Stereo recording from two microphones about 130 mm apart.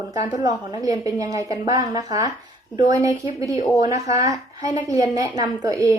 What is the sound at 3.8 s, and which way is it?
Speech, 25° right (ahead or behind).